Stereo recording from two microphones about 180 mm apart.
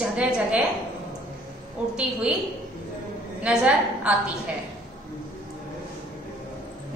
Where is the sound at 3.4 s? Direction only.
5° right (ahead or behind).